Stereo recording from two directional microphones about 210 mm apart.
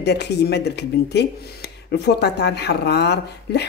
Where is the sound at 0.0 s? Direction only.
50° left (ahead or behind).